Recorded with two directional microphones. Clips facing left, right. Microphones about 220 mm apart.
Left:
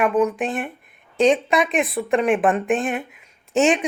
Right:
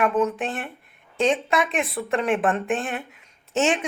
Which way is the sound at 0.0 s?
15° left (ahead or behind).